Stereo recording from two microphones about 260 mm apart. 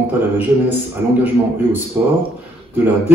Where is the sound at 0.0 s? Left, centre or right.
Centre.